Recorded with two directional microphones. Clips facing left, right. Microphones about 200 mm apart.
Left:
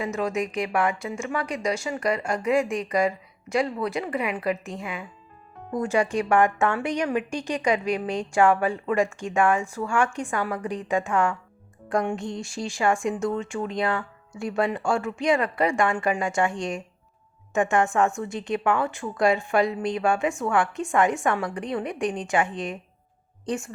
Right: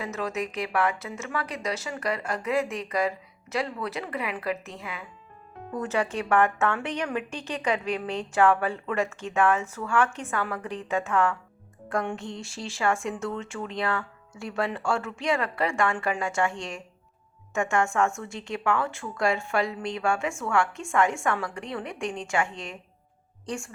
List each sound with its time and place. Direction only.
0.0 s a woman's voice: 15° left (ahead or behind)